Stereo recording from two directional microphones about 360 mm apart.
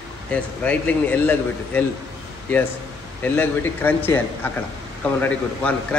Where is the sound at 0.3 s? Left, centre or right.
Centre.